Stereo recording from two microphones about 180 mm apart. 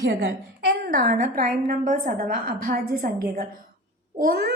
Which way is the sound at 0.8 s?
55° right (ahead or behind).